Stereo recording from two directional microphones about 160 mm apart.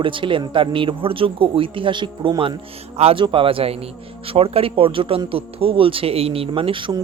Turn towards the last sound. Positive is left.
turn(degrees=-30)  # may be behind; listen again after turning